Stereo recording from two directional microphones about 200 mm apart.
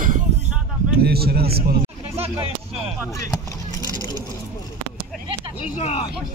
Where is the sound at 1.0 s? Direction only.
50° right (ahead or behind).